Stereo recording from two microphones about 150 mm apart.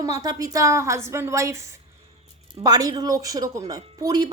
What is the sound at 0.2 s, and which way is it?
Speech, 25° right (ahead or behind).